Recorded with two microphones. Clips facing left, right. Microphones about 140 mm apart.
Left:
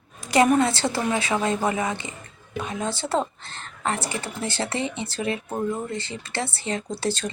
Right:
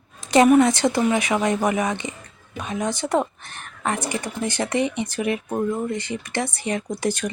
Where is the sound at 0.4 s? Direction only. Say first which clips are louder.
Right 5 dB; 15° right (ahead or behind).